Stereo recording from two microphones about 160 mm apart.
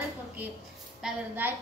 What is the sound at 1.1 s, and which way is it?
Speech, 10° right (ahead or behind).